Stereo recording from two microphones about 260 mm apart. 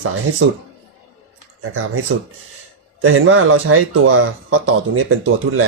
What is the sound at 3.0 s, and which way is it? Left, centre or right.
Speech, right.